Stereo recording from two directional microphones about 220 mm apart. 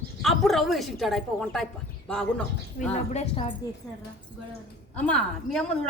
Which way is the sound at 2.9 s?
30° left (ahead or behind).